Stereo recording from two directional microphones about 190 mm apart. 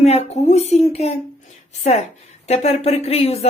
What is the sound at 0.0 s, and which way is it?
Speech, 35° left (ahead or behind).